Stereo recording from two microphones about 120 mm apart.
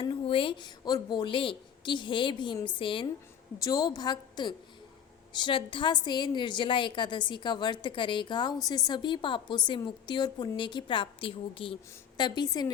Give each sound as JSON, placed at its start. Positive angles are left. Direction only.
{"t": 0.0, "sound": "a woman's voice", "side_deg": 45}
{"t": 3.6, "sound": "a woman's voice", "side_deg": 30}